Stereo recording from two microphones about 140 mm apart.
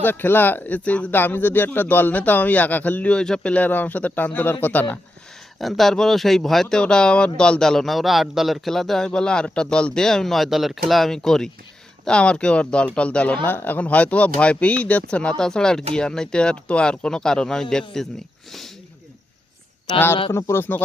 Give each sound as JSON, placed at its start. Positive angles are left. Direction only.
{"t": 0.0, "sound": "speech", "side_deg": 15}
{"t": 5.5, "sound": "a man's voice", "side_deg": 0}
{"t": 20.3, "sound": "speech", "side_deg": 15}